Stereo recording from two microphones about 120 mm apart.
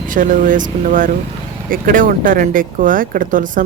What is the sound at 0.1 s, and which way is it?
Speech, 90° right.